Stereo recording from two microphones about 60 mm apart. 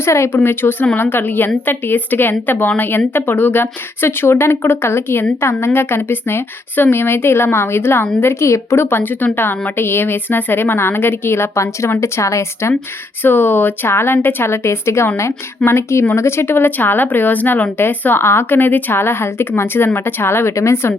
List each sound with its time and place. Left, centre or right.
0.0 s speech: left
13.2 s speech: left